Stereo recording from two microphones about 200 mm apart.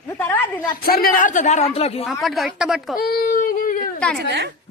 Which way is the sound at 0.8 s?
45° left (ahead or behind).